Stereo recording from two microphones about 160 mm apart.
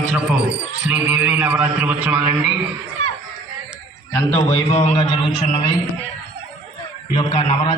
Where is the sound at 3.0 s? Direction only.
40° left (ahead or behind).